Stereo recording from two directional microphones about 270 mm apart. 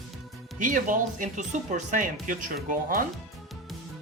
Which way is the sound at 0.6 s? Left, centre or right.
Right.